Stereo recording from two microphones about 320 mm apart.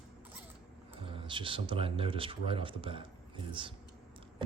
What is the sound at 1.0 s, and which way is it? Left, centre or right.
Speech, centre.